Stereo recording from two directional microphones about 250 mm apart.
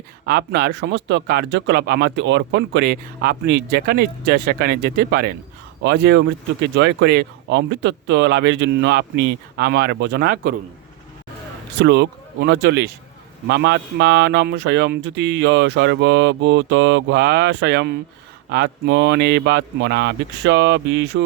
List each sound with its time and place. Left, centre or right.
0.3 s speech: right
11.8 s speech: right